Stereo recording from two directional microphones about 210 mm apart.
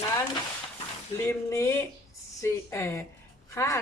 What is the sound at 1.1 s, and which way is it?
Speech, 10° left (ahead or behind).